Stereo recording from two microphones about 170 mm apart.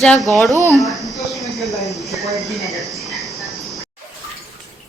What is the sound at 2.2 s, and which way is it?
Speech, centre (ahead or behind).